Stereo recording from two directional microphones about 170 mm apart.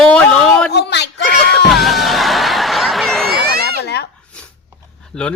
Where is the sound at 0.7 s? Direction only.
80° left.